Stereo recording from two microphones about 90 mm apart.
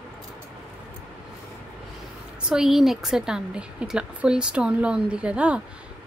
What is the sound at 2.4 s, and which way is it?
A woman's voice, 5° right (ahead or behind).